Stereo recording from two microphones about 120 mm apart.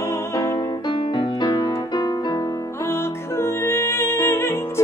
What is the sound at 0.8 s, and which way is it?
Music, 40° left (ahead or behind).